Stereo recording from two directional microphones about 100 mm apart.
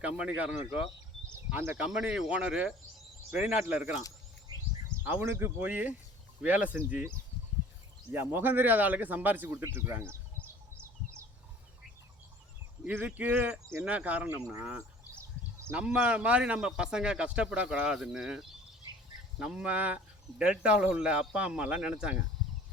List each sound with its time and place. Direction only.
0.0 s a man's voice: 15° right (ahead or behind)
5.0 s a man's voice: 20° right (ahead or behind)
8.1 s speech: 20° right (ahead or behind)
9.6 s insect: 25° right (ahead or behind)
12.8 s a man's voice: 20° right (ahead or behind)
15.1 s a sound: 30° right (ahead or behind)
15.7 s a man's voice: 10° right (ahead or behind)